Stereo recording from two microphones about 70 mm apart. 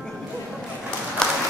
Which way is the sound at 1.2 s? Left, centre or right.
Centre.